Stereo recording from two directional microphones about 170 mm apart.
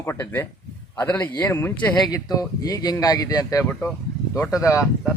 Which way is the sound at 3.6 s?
10° left (ahead or behind).